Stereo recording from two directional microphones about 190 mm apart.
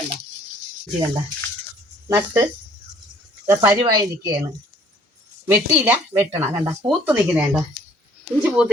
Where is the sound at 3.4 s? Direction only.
15° right (ahead or behind).